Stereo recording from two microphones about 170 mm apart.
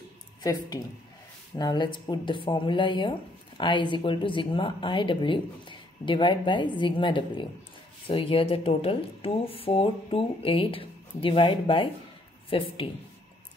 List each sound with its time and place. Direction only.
0.4 s speech: 20° left (ahead or behind)